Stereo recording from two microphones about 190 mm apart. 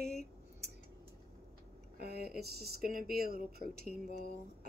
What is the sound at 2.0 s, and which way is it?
Speech, 55° right (ahead or behind).